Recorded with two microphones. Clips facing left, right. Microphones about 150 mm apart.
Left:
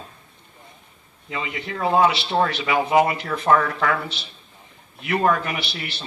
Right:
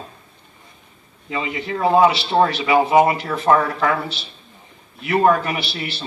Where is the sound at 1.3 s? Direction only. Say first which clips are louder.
Right 5 dB; 30° right (ahead or behind).